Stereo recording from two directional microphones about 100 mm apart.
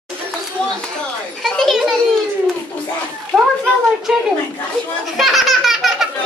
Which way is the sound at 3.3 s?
5° right (ahead or behind).